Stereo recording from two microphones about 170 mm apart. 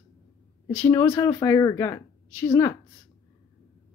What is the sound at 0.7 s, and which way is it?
Speech, 15° left (ahead or behind).